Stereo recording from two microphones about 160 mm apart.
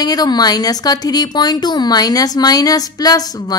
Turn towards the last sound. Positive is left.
turn(degrees=25)  # may be behind; listen again after turning